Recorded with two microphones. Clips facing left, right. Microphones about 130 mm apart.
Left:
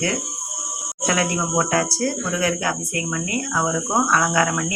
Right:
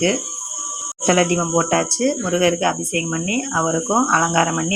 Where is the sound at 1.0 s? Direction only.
30° right (ahead or behind).